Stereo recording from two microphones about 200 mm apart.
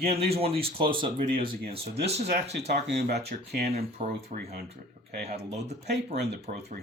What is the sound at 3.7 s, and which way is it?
Speech, 35° right (ahead or behind).